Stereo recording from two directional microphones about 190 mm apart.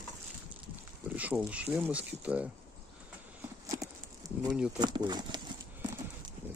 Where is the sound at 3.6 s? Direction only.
20° right (ahead or behind).